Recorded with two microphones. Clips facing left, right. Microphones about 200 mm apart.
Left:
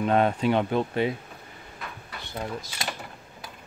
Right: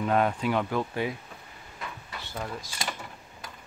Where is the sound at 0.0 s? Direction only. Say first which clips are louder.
Left 3 dB; 25° left (ahead or behind).